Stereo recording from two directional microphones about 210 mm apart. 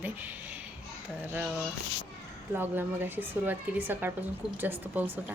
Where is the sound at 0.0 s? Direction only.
10° right (ahead or behind).